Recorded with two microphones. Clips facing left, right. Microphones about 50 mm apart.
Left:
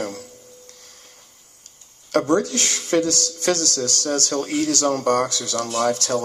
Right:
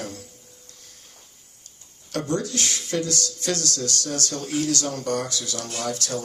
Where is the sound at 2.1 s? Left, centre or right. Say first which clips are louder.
Left 8 dB; left.